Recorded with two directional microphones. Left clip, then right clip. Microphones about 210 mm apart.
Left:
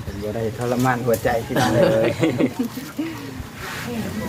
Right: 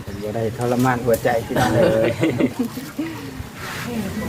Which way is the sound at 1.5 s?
55° left (ahead or behind).